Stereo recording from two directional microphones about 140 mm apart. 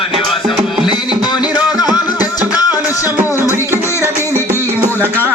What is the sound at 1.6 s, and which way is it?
Music, 30° left (ahead or behind).